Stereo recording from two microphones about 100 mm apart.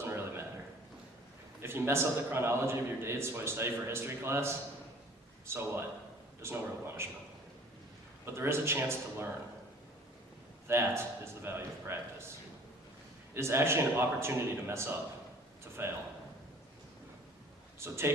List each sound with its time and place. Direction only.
0.0 s a sound: 25° right (ahead or behind)
1.6 s a man's voice: 25° right (ahead or behind)
8.2 s a man's voice: 25° right (ahead or behind)
10.7 s a man's voice: 25° right (ahead or behind)
13.3 s a man's voice: 25° right (ahead or behind)
17.7 s speech: 25° right (ahead or behind)